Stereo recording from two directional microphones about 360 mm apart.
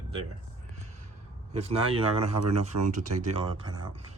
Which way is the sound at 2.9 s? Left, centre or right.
Right.